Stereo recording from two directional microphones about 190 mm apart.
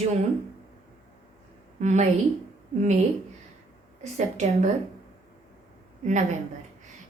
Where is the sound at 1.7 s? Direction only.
40° right (ahead or behind).